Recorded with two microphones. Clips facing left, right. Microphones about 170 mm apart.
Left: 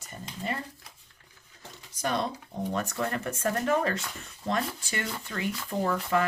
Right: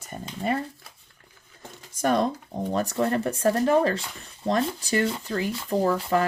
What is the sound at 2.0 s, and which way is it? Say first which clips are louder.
Speech: right 7 dB; 50° right (ahead or behind).